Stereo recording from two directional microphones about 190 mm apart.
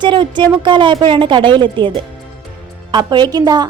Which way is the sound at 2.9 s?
25° right (ahead or behind).